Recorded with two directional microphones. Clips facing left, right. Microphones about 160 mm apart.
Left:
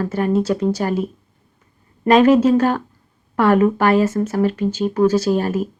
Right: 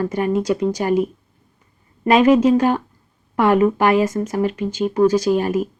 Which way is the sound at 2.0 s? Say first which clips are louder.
Left 1 dB; 10° right (ahead or behind).